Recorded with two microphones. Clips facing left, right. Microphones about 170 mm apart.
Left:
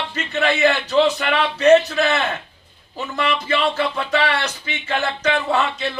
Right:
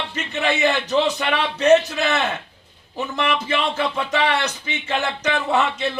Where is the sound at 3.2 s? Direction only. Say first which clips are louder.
Left 3 dB; 20° right (ahead or behind).